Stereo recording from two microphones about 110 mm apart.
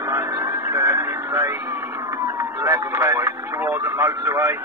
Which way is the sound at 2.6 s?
25° right (ahead or behind).